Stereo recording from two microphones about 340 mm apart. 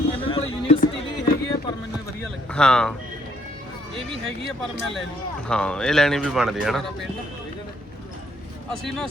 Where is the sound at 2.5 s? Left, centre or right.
Centre.